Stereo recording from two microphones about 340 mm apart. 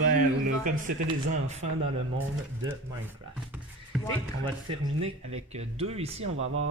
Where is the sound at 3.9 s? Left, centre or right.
Centre.